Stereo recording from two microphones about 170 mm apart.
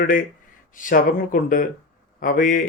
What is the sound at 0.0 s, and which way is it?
Speech, 55° left (ahead or behind).